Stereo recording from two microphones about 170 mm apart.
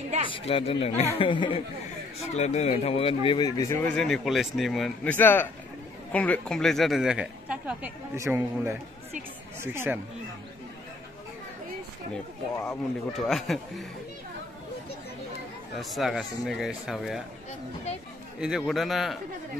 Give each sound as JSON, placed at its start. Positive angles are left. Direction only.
{"t": 0.3, "sound": "speech", "side_deg": 30}
{"t": 2.1, "sound": "speech", "side_deg": 40}
{"t": 3.9, "sound": "a man's voice", "side_deg": 0}
{"t": 13.1, "sound": "speech", "side_deg": 0}
{"t": 15.7, "sound": "speech", "side_deg": 0}
{"t": 18.4, "sound": "speech", "side_deg": 0}